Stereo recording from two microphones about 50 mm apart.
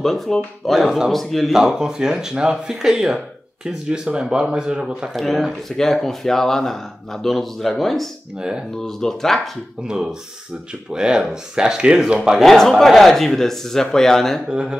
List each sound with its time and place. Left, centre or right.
0.0 s speech: centre
0.7 s speech: centre
1.1 s speech: centre
1.5 s speech: centre
5.1 s speech: centre
8.4 s speech: centre
8.8 s speech: centre
9.8 s speech: centre
12.4 s speech: centre
14.5 s speech: centre